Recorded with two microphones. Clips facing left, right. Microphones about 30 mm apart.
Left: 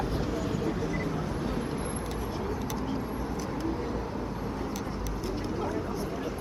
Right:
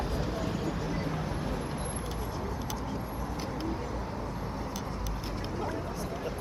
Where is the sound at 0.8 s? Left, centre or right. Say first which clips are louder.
Left 2 dB; centre.